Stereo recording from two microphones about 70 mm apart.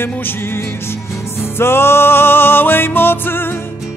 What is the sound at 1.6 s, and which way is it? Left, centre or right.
Music, left.